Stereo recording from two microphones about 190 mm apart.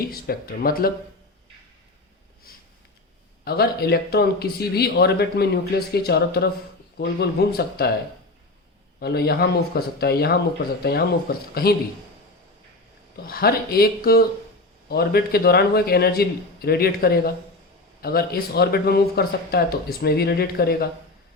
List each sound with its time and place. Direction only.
0.0 s speech: 55° left (ahead or behind)
2.5 s a sound: 50° left (ahead or behind)
3.4 s speech: 55° left (ahead or behind)
9.0 s speech: 55° left (ahead or behind)
13.2 s speech: 55° left (ahead or behind)